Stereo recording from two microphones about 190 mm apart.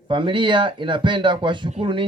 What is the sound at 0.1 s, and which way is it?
Speech, 25° right (ahead or behind).